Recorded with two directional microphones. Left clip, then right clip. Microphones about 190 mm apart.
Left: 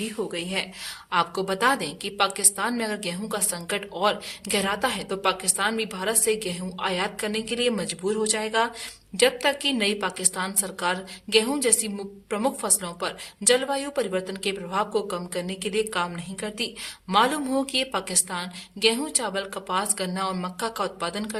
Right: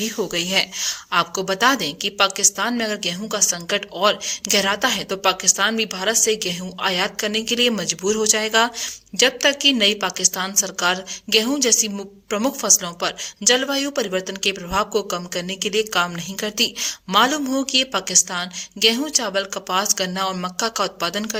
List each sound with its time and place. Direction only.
0.0 s speech: 35° right (ahead or behind)